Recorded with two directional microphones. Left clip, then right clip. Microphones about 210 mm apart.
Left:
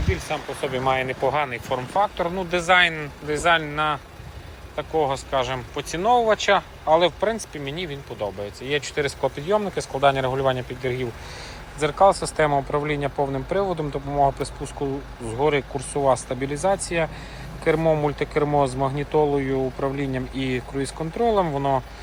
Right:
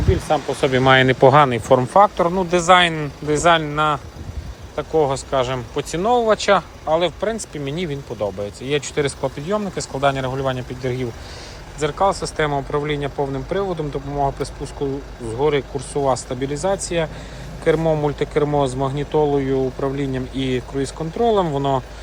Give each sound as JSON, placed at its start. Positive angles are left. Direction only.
{"t": 0.8, "sound": "speech", "side_deg": -50}